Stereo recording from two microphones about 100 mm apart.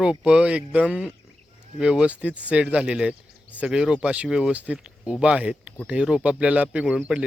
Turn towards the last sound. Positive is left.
turn(degrees=-10)  # may be behind; listen again after turning